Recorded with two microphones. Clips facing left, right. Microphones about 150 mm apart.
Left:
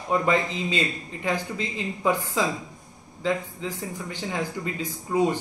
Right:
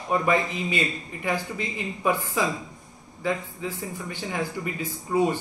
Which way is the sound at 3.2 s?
15° left (ahead or behind).